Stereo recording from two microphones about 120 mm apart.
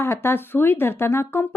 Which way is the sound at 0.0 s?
20° left (ahead or behind).